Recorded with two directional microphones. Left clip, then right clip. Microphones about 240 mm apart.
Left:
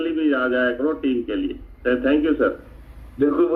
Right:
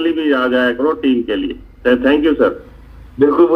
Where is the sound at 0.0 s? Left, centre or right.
Right.